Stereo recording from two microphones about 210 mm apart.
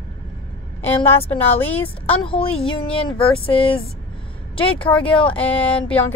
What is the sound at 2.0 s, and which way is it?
A woman's voice, 25° left (ahead or behind).